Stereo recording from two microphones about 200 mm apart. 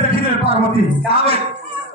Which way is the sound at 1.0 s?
30° right (ahead or behind).